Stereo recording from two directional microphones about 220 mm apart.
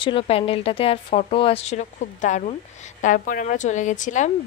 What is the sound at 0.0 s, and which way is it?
A woman's voice, 25° left (ahead or behind).